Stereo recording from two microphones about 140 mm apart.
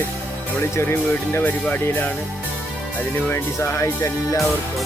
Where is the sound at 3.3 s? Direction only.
20° left (ahead or behind).